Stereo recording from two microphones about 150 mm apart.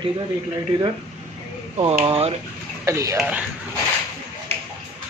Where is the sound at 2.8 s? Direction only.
20° right (ahead or behind).